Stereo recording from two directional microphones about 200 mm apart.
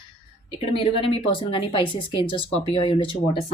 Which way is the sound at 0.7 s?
30° left (ahead or behind).